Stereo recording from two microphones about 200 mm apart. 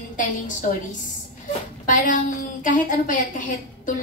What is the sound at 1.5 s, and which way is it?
A woman's voice, 40° left (ahead or behind).